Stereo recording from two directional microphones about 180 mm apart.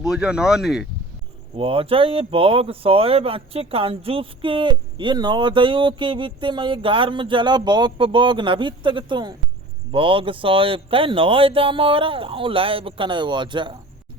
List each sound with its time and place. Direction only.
0.0 s speech: 5° right (ahead or behind)
1.5 s speech: 30° right (ahead or behind)